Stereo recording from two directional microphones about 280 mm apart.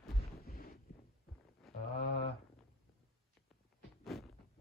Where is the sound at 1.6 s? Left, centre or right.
Centre.